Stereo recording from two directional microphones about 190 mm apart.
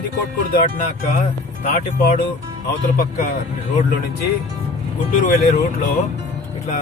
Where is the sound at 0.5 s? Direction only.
45° left (ahead or behind).